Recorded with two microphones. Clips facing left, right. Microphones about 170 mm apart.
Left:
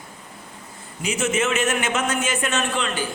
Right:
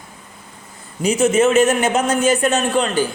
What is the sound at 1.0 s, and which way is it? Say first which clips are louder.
A man's voice: right 8 dB; 35° right (ahead or behind).